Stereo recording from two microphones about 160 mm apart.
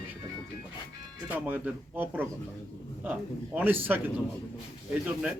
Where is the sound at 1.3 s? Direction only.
10° right (ahead or behind).